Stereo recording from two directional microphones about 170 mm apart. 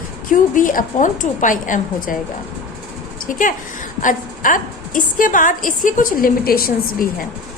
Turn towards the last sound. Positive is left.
turn(degrees=55)  # may be behind; listen again after turning